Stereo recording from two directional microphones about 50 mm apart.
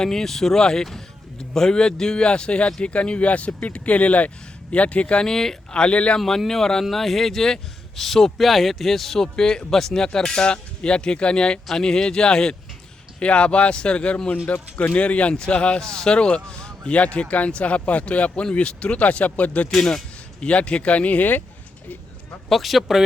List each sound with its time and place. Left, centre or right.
0.0 s speech: centre; by 5.2 s left
5.2 s speech: centre
5.8 s speech: left
6.1 s speech: centre
17.2 s speech: left
19.7 s speech: centre
20.4 s speech: left
22.4 s speech: centre